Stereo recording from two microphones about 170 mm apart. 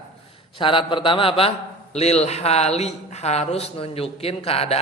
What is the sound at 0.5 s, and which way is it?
A man's voice, 30° left (ahead or behind).